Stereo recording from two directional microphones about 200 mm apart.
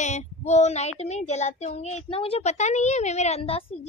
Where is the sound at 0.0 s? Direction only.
35° left (ahead or behind).